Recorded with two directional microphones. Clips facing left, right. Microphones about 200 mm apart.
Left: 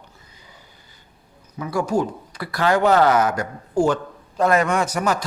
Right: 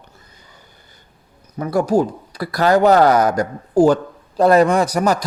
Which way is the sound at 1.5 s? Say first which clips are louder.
Right 5 dB; 40° right (ahead or behind).